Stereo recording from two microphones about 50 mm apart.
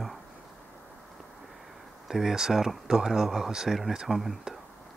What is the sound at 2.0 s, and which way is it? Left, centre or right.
Speech, centre.